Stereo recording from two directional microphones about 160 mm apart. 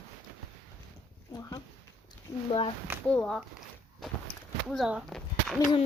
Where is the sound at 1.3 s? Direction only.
20° left (ahead or behind).